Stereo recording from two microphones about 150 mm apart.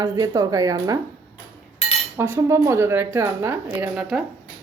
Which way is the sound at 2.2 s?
15° right (ahead or behind).